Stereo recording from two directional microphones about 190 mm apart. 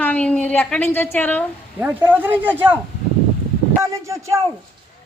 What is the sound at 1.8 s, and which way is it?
Speech, 10° right (ahead or behind).